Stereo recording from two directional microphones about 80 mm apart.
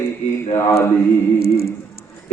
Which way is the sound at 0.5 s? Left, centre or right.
Left.